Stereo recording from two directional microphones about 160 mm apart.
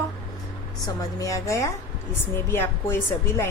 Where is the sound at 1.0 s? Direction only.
20° left (ahead or behind).